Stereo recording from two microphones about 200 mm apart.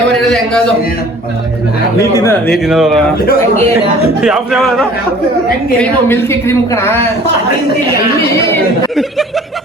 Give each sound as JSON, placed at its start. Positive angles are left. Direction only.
{"t": 0.1, "sound": "a sound", "side_deg": 5}
{"t": 2.0, "sound": "a woman's voice", "side_deg": 15}
{"t": 2.6, "sound": "speech", "side_deg": 0}
{"t": 3.2, "sound": "speech", "side_deg": 45}
{"t": 4.2, "sound": "speech", "side_deg": -5}
{"t": 5.8, "sound": "a woman's voice", "side_deg": 10}
{"t": 8.5, "sound": "speech", "side_deg": 0}